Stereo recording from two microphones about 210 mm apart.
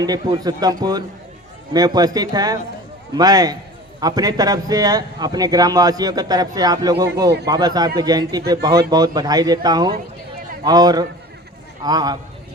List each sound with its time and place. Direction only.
0.0 s a man's voice: 20° right (ahead or behind)